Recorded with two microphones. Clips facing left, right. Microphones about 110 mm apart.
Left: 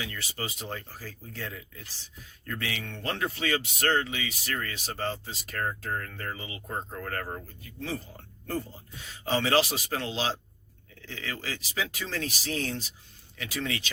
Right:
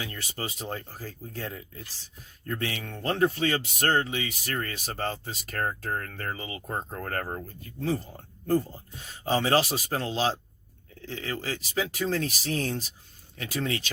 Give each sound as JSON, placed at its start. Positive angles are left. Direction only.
{"t": 0.0, "sound": "speech", "side_deg": -40}